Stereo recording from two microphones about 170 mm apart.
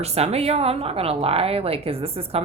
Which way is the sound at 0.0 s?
35° right (ahead or behind).